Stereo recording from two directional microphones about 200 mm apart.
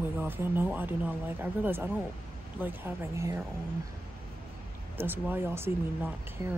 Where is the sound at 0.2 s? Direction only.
10° right (ahead or behind).